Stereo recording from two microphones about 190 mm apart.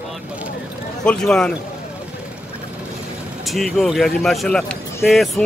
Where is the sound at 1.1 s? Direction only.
5° left (ahead or behind).